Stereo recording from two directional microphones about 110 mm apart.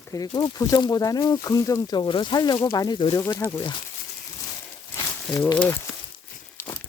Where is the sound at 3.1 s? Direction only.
25° left (ahead or behind).